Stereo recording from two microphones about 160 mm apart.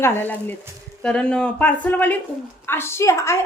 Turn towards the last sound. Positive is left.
turn(degrees=15)  # may be behind; listen again after turning